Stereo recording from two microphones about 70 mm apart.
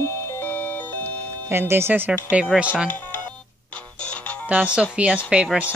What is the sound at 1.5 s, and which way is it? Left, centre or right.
Speech, right.